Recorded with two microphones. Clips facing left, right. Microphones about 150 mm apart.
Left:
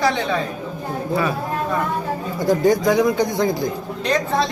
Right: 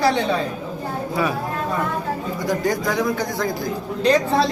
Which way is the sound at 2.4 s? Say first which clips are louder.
Left 6 dB; 25° left (ahead or behind).